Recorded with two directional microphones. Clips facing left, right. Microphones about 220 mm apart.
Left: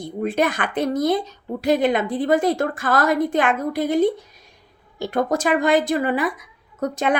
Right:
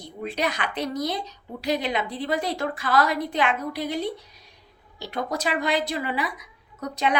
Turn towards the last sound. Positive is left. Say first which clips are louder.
# left 5 dB
turn(degrees=50)  # may be behind; listen again after turning